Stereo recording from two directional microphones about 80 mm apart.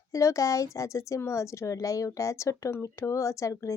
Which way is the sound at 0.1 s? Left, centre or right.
Left.